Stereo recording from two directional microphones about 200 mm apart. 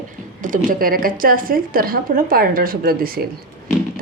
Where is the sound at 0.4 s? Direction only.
45° right (ahead or behind).